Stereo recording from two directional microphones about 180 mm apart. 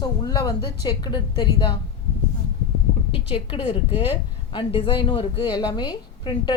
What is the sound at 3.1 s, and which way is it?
Speech, 30° left (ahead or behind).